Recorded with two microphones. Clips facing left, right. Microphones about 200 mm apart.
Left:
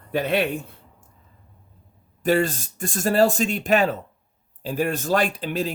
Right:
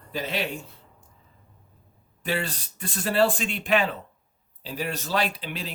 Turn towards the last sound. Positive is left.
turn(degrees=45)  # may be behind; listen again after turning